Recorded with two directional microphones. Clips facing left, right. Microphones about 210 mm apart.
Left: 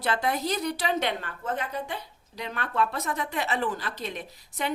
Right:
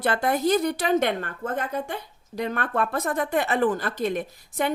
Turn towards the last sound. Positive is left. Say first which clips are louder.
# right 6 dB
turn(degrees=-50)  # may be behind; listen again after turning